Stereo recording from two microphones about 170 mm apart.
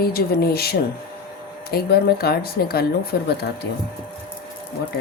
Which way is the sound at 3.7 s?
90° left.